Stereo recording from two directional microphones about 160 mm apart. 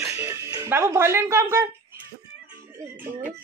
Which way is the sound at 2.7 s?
10° right (ahead or behind).